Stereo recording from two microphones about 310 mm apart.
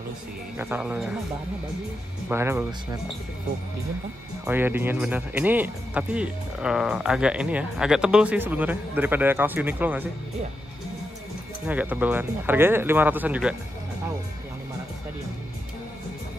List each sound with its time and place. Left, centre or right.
0.6 s speech: centre
2.2 s speech: centre
4.5 s speech: centre
11.6 s speech: centre